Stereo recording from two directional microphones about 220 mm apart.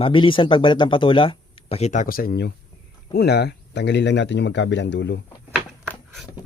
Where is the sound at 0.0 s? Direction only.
25° left (ahead or behind); by 5.2 s 55° left (ahead or behind).